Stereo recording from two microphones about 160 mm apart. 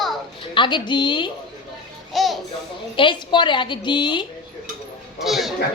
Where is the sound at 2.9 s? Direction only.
30° left (ahead or behind).